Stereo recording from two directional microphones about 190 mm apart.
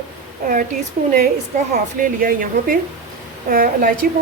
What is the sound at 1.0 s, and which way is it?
A woman's voice, 45° right (ahead or behind).